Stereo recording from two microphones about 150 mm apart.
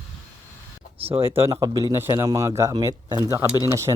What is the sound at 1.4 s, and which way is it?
Speech, 20° right (ahead or behind).